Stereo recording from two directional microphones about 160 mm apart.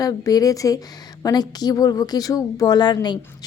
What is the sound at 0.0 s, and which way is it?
A woman's voice, 20° left (ahead or behind).